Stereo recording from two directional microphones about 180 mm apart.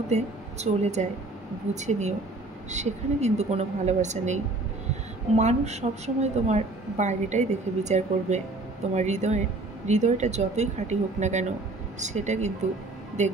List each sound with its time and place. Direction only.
0.1 s a woman's voice: 40° right (ahead or behind)